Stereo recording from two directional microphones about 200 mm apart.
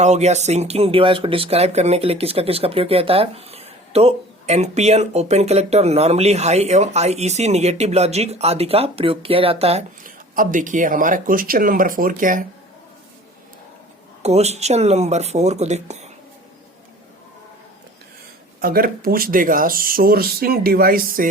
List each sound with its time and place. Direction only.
0.0 s speech: 35° right (ahead or behind)
14.2 s speech: 30° right (ahead or behind)
18.6 s speech: 45° right (ahead or behind)